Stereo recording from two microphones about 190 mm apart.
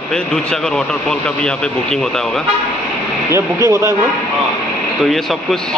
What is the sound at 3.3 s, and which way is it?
Speech, 15° right (ahead or behind).